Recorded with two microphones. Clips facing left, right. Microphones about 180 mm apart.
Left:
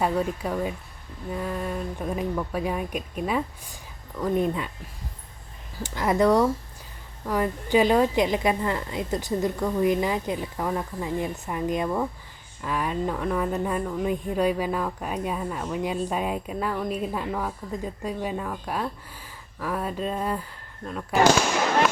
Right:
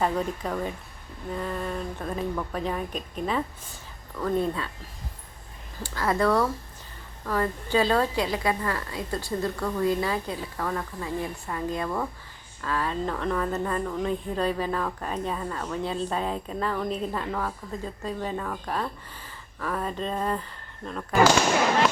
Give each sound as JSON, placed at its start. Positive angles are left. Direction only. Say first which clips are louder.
{"t": 0.0, "sound": "speech", "louder": "left 2 dB", "side_deg": 10}
{"t": 5.8, "sound": "speech", "louder": "left 3 dB", "side_deg": 20}